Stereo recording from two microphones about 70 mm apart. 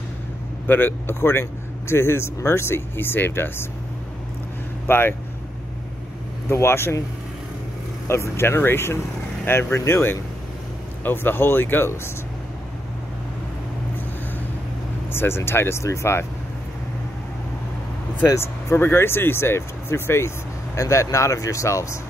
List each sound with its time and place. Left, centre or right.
0.7 s speech: left
4.8 s speech: left
6.5 s speech: left
8.1 s speech: left
15.1 s speech: left
18.4 s speech: left